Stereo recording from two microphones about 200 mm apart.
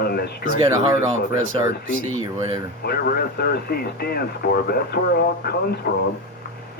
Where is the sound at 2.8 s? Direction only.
50° left (ahead or behind).